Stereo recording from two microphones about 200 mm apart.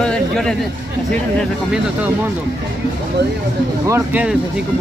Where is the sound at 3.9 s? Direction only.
10° right (ahead or behind).